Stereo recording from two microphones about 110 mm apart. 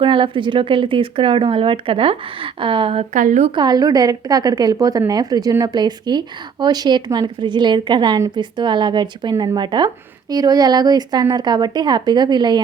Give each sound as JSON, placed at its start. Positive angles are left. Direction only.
{"t": 0.0, "sound": "speech", "side_deg": -50}
{"t": 3.5, "sound": "a woman's voice", "side_deg": -40}